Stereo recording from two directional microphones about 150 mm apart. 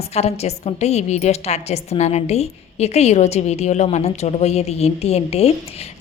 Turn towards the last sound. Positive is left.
turn(degrees=45)  # may be behind; listen again after turning